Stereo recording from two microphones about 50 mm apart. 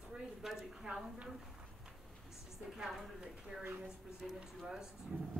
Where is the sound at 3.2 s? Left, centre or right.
Centre.